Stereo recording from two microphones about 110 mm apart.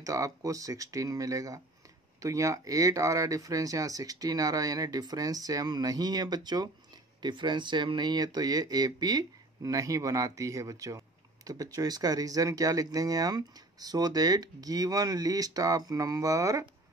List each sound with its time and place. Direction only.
0.0 s speech: 30° right (ahead or behind)